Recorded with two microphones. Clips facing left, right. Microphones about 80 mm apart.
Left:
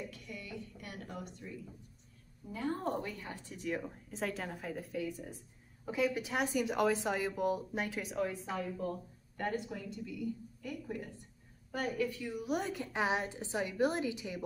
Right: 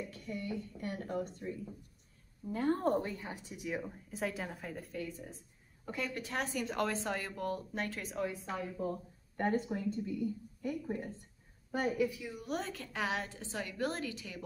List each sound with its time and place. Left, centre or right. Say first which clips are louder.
0.1 s speech: right 6 dB; right
2.5 s a woman's voice: right 5 dB; right
3.2 s speech: right 1 dB; centre
9.4 s a woman's voice: right 4 dB; right
11.7 s speech: right 2 dB; centre
12.2 s speech: left 3 dB; centre